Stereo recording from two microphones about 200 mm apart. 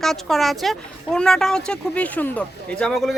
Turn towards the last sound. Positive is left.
turn(degrees=0)  # may be behind; listen again after turning